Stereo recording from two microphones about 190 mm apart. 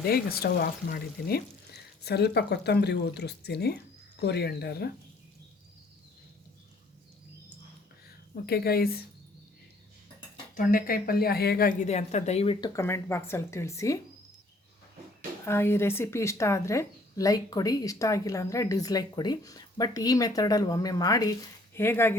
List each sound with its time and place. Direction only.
0.0 s speech: 55° left (ahead or behind)
8.4 s speech: 55° left (ahead or behind)
10.5 s speech: 45° left (ahead or behind)
11.8 s speech: 35° left (ahead or behind); by 14.0 s 15° left (ahead or behind)
15.4 s speech: 15° left (ahead or behind)